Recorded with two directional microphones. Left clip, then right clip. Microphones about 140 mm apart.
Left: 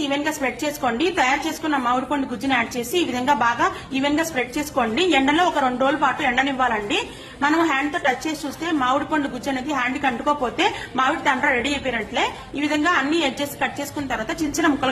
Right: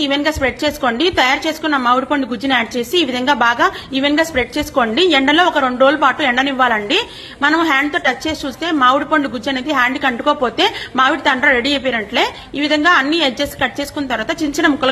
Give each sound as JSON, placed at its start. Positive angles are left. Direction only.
{"t": 0.1, "sound": "a woman's voice", "side_deg": -30}